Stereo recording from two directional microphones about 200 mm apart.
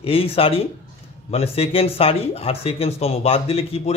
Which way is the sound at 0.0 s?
30° left (ahead or behind).